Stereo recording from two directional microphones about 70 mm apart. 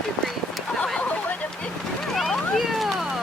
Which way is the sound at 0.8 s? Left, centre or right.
Centre.